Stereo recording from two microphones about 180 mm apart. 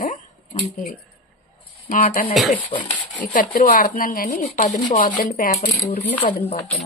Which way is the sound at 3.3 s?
50° left (ahead or behind).